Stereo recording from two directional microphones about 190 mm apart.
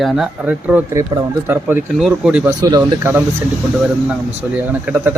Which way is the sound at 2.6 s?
20° right (ahead or behind).